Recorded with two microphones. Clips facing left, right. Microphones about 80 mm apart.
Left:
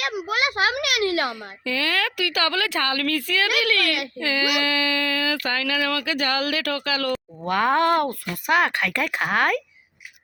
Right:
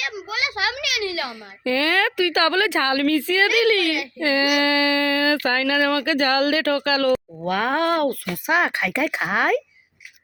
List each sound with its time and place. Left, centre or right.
0.0 s a sound: left
1.6 s speech: right
3.8 s a child's voice: left
4.2 s speech: right
7.4 s speech: centre
8.4 s speech: centre